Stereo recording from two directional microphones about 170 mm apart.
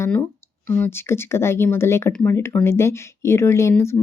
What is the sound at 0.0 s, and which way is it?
Speech, 15° left (ahead or behind).